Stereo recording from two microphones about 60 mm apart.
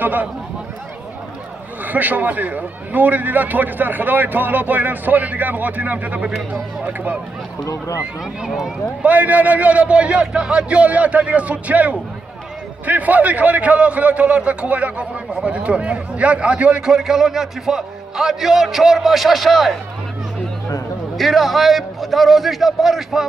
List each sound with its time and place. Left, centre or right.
0.0 s a man's voice: right
1.9 s a man's voice: right
7.6 s speech: left
8.4 s speech: centre
9.0 s a man's voice: right
16.9 s a man's voice: centre
21.2 s a man's voice: centre